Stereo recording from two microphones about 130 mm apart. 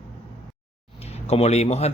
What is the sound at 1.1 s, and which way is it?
Speech, 55° left (ahead or behind).